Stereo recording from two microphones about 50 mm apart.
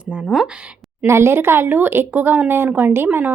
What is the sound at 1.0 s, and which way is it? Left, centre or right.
A woman's voice, right.